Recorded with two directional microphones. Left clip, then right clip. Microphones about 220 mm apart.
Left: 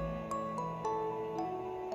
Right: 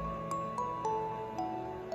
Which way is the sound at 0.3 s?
Centre (ahead or behind).